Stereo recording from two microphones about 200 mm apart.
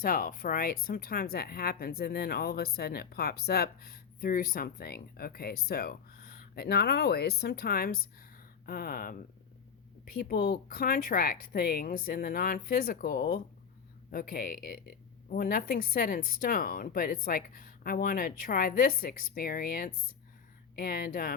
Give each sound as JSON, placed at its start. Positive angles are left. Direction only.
{"t": 0.0, "sound": "speech", "side_deg": 45}